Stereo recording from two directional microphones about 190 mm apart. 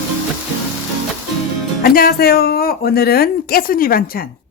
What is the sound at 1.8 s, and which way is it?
A woman's voice, 55° left (ahead or behind).